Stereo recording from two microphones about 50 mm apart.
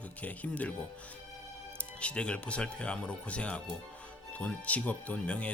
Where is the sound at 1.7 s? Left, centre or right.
Left.